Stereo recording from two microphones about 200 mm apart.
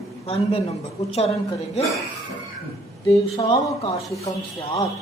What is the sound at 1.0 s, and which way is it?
Speech, 35° left (ahead or behind).